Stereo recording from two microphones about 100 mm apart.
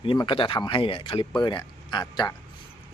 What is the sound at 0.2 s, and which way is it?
Speech, 55° left (ahead or behind).